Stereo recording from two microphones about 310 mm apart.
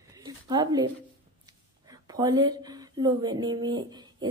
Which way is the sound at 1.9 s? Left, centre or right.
Centre.